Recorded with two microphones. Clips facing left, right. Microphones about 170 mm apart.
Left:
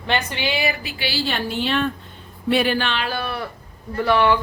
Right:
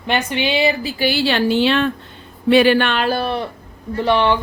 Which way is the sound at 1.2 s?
90° right.